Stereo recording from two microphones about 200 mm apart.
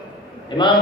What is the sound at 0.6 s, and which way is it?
Speech, 20° left (ahead or behind).